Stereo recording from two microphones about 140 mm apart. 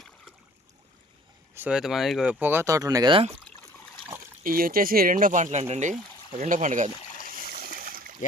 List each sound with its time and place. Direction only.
1.5 s speech: 10° right (ahead or behind); by 3.1 s 25° right (ahead or behind)
3.1 s speech: 40° right (ahead or behind)
4.4 s speech: 90° right; by 6.9 s 60° right (ahead or behind)
7.7 s splash: 90° right